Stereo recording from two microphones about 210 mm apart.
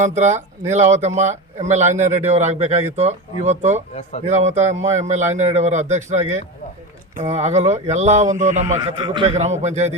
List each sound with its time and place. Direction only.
0.0 s speech: 35° right (ahead or behind)